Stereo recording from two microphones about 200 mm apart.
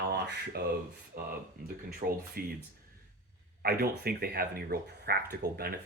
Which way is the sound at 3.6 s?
50° right (ahead or behind).